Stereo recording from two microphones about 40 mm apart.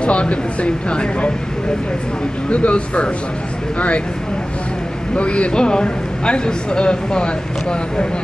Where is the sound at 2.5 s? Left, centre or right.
Left.